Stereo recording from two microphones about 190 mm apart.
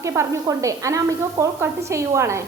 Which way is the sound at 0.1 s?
15° right (ahead or behind).